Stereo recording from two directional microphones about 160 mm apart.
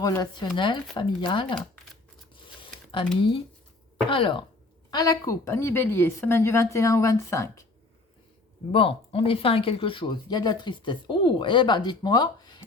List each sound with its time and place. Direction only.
0.0 s speech: 25° left (ahead or behind)
3.2 s speech: 30° left (ahead or behind)
8.7 s speech: 35° left (ahead or behind)